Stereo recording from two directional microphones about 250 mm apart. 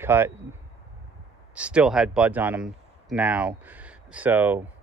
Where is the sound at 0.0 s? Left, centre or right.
Centre.